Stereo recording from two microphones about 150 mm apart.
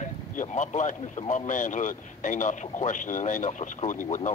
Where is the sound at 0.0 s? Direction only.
50° left (ahead or behind).